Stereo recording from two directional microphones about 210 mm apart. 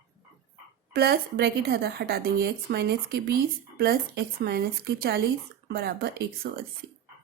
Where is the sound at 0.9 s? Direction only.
50° right (ahead or behind).